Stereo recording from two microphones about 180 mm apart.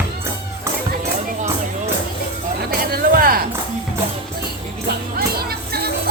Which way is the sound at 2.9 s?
55° right (ahead or behind).